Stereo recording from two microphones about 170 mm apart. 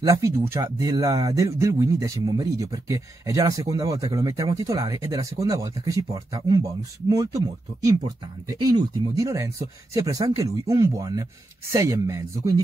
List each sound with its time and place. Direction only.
0.0 s speech: 15° right (ahead or behind)